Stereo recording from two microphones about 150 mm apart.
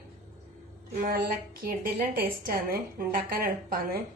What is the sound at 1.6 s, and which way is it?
A woman's voice, 75° right (ahead or behind).